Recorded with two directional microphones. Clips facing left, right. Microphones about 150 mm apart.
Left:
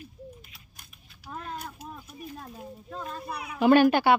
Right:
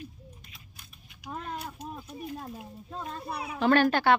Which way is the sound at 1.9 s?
25° right (ahead or behind).